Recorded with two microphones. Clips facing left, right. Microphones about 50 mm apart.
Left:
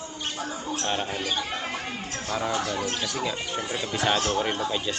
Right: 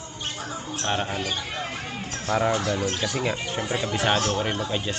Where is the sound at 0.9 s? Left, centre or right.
Right.